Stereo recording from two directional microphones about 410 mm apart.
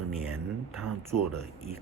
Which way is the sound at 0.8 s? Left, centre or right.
Centre.